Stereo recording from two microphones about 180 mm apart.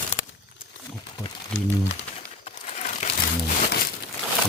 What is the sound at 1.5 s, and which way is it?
Speech, 90° left.